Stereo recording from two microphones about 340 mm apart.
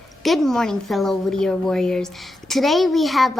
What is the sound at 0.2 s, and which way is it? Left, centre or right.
A woman's voice, centre.